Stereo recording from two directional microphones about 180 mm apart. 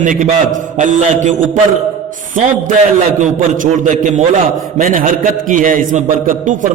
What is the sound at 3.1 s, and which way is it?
A man's voice, 45° right (ahead or behind).